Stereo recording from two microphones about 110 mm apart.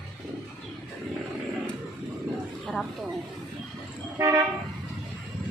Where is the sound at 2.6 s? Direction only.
Centre (ahead or behind).